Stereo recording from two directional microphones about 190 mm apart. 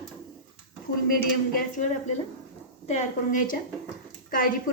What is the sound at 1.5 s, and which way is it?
A woman's voice, 40° left (ahead or behind).